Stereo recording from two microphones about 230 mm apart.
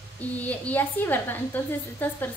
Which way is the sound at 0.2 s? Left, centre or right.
Centre.